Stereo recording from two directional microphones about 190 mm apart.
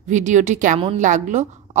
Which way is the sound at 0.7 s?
30° right (ahead or behind).